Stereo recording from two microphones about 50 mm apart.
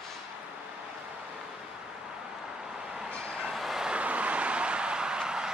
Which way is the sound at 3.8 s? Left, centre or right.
Right.